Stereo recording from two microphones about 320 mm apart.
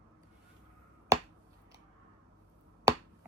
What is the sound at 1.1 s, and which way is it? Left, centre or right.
Finger snapping, centre.